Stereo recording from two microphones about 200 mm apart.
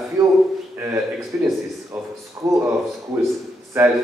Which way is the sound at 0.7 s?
10° right (ahead or behind).